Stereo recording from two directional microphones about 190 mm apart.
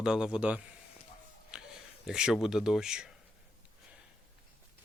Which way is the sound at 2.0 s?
5° right (ahead or behind).